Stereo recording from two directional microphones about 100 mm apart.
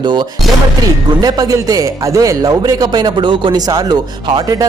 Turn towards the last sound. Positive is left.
turn(degrees=-50)  # may be behind; listen again after turning